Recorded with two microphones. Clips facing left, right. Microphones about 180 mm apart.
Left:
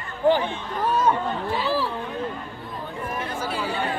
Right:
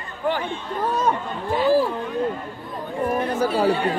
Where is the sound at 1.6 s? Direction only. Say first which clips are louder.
Right 10 dB; 50° right (ahead or behind).